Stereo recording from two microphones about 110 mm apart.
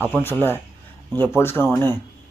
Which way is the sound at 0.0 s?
20° left (ahead or behind).